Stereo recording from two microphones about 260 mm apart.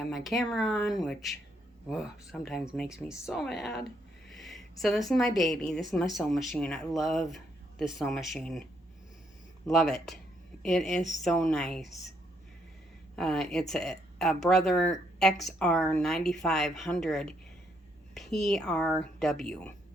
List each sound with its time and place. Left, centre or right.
0.0 s a woman's voice: centre
9.6 s a woman's voice: centre
13.1 s a woman's voice: centre